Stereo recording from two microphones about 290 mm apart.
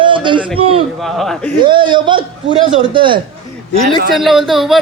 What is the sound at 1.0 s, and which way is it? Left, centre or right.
Speech, centre.